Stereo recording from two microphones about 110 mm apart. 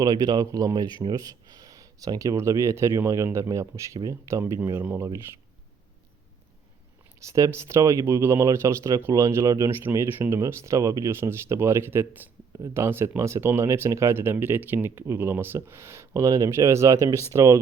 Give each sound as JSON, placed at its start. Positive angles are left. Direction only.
{"t": 0.0, "sound": "speech", "side_deg": -35}
{"t": 7.2, "sound": "speech", "side_deg": -30}